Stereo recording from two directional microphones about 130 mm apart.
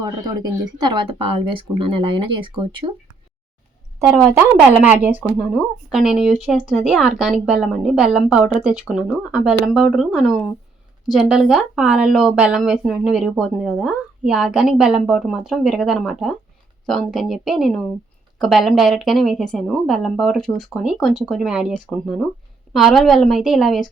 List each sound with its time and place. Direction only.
0.0 s speech: 30° right (ahead or behind)
4.8 s speech: 10° right (ahead or behind)
5.5 s speech: centre (ahead or behind)